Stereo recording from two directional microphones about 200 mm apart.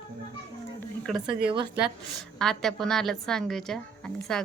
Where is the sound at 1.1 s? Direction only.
20° right (ahead or behind).